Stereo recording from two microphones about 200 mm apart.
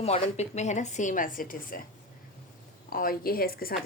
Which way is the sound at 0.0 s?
35° left (ahead or behind).